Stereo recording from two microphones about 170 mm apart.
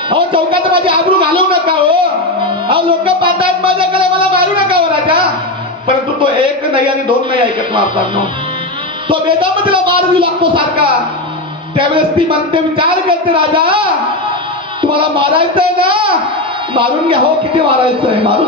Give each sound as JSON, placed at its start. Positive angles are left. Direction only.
{"t": 0.1, "sound": "a man's voice", "side_deg": -30}